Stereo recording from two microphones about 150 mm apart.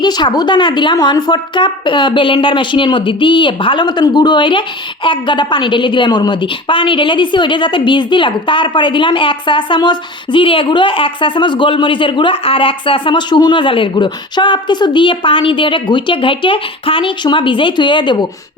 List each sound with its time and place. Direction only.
0.0 s a woman's voice: 30° left (ahead or behind)